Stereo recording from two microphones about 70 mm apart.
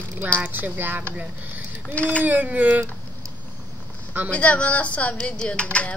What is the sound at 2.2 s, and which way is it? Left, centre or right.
Speech, right.